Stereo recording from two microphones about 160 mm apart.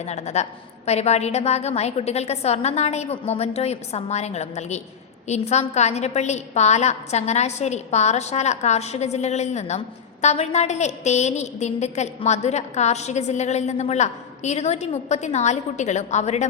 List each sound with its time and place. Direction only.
0.0 s a woman's voice: 45° left (ahead or behind)